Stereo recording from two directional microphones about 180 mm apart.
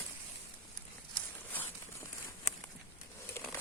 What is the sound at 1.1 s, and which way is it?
Walk, 10° left (ahead or behind).